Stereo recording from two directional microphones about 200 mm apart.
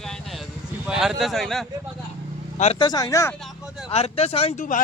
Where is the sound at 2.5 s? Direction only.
35° left (ahead or behind).